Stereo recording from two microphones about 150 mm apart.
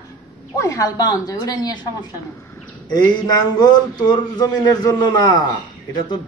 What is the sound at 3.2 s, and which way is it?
A man's voice, 30° left (ahead or behind).